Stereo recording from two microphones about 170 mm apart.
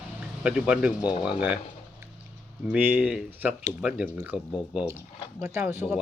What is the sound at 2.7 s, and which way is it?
Speech, 10° right (ahead or behind).